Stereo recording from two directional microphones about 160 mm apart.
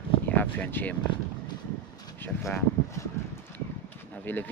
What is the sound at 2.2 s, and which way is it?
Speech, 15° left (ahead or behind).